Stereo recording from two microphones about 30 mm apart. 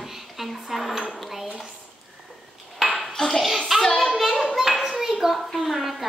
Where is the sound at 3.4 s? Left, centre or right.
Centre.